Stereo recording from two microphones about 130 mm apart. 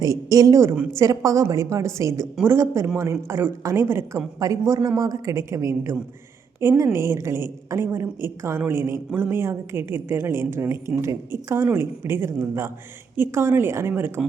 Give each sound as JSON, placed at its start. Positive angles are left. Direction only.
{"t": 0.0, "sound": "a woman's voice", "side_deg": -30}